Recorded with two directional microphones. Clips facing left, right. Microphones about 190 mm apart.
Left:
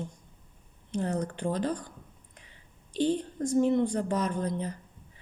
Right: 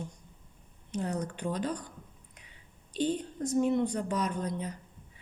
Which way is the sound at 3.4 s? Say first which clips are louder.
Left 3 dB; 45° left (ahead or behind).